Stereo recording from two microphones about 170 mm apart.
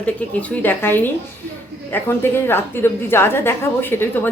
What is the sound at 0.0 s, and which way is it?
Speech, 10° left (ahead or behind).